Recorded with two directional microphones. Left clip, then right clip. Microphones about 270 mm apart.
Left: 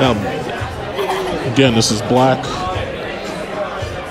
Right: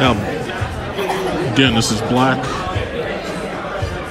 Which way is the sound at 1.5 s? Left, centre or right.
Centre.